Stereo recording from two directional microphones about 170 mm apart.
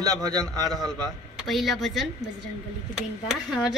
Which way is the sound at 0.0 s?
20° right (ahead or behind).